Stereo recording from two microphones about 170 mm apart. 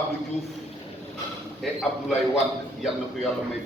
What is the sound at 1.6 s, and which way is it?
Speech, centre (ahead or behind).